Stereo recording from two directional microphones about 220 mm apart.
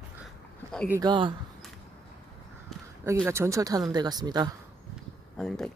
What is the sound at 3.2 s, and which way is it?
Speech, 10° right (ahead or behind).